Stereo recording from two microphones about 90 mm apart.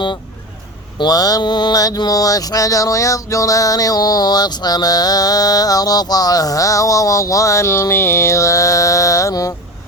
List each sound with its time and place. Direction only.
0.9 s mantra: 45° left (ahead or behind)